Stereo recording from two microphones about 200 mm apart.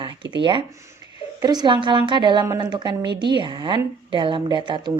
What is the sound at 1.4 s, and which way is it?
A woman's voice, 20° right (ahead or behind).